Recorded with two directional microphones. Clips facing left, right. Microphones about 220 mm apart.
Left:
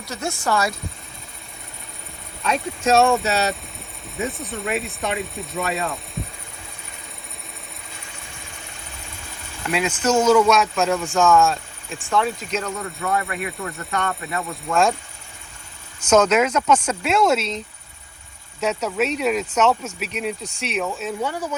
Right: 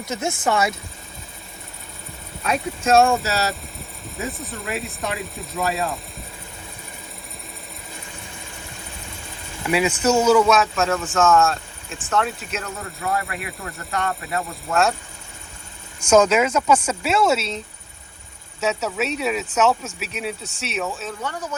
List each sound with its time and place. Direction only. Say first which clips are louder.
0.0 s speech: right 3 dB; 20° right (ahead or behind)
2.4 s speech: left 1 dB; 5° right (ahead or behind)
9.6 s speech: right 2 dB; 10° right (ahead or behind)
11.9 s speech: left 1 dB; 10° left (ahead or behind)
12.5 s speech: left 4 dB; 5° right (ahead or behind)
16.0 s speech: even; 10° right (ahead or behind)
18.6 s speech: left 1 dB; 5° right (ahead or behind)